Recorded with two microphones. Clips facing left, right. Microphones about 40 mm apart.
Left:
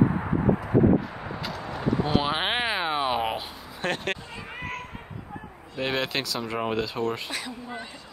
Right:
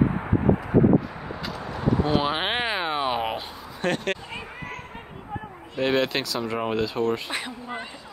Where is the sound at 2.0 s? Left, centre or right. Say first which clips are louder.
Right 1 dB; centre.